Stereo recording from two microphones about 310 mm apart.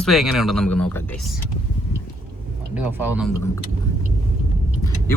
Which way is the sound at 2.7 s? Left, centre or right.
Centre.